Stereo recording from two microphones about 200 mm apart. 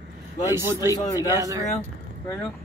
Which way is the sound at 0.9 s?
15° left (ahead or behind).